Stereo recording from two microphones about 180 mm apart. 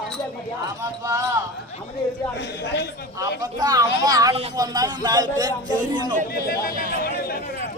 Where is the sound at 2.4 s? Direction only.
70° left (ahead or behind).